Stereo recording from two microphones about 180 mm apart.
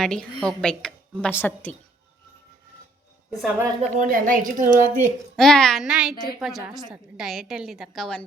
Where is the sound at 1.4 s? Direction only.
10° left (ahead or behind).